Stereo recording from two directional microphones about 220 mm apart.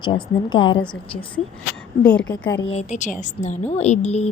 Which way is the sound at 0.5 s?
20° left (ahead or behind).